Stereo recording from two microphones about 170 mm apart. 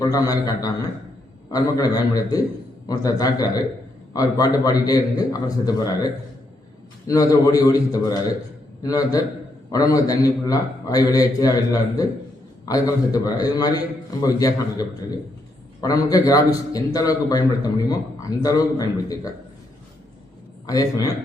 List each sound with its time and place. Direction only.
0.0 s a man's voice: 20° left (ahead or behind)
7.1 s a man's voice: 20° left (ahead or behind)
20.7 s a man's voice: 20° left (ahead or behind)